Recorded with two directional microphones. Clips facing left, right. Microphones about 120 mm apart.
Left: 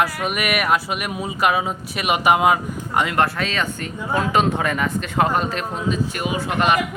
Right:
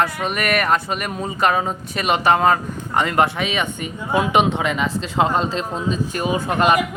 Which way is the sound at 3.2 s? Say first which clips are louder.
Right 2 dB; 10° right (ahead or behind).